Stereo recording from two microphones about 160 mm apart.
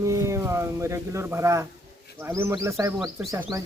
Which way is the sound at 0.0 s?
20° right (ahead or behind).